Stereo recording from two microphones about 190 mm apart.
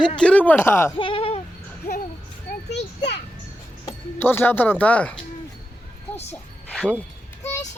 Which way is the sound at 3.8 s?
10° left (ahead or behind).